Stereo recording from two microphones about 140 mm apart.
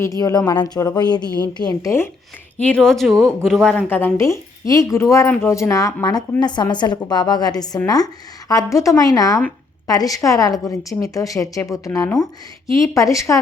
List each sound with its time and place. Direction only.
0.0 s a woman's voice: 25° left (ahead or behind)
2.6 s a man's voice: 10° left (ahead or behind)
3.8 s a woman's voice: 15° left (ahead or behind)